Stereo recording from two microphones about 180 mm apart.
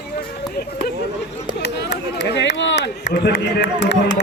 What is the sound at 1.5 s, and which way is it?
Run, 65° left (ahead or behind).